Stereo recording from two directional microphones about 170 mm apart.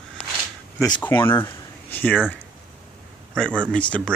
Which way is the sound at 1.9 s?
10° left (ahead or behind).